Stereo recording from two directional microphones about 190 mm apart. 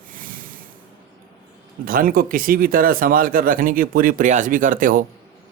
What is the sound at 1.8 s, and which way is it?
Speech, 50° right (ahead or behind).